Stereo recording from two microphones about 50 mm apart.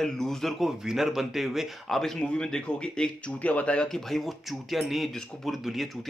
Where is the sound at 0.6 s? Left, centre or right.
Centre.